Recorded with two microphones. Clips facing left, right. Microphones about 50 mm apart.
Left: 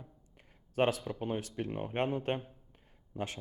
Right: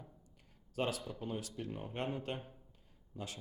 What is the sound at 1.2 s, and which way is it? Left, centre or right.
Speech, left.